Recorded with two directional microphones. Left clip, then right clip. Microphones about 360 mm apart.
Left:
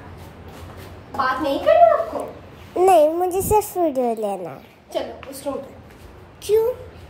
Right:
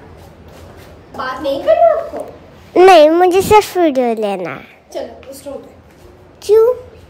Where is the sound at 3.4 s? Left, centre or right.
Right.